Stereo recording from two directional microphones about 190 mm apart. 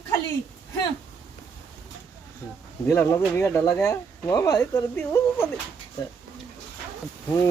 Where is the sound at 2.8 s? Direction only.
10° left (ahead or behind).